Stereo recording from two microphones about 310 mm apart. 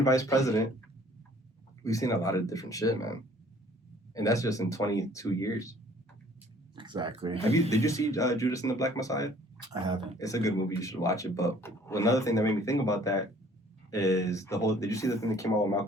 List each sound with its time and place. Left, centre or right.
0.0 s speech: centre
1.8 s speech: centre
6.7 s speech: centre
7.5 s speech: centre
9.6 s speech: centre
10.2 s speech: centre